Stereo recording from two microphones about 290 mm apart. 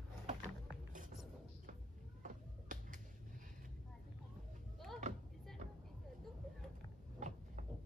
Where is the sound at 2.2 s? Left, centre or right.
Right.